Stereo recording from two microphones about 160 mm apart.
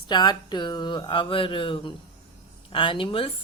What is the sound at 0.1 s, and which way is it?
Speech, 25° left (ahead or behind).